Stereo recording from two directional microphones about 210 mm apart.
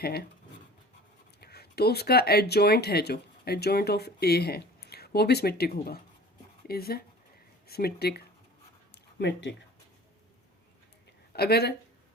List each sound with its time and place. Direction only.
0.0 s speech: 45° left (ahead or behind)
1.4 s speech: 50° left (ahead or behind)
11.3 s speech: 50° left (ahead or behind)